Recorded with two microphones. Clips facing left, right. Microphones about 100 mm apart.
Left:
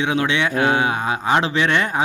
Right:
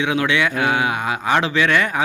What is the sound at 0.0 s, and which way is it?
Speech, 30° left (ahead or behind).